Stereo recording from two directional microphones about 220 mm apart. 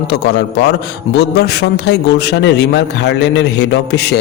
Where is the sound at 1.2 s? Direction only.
50° left (ahead or behind).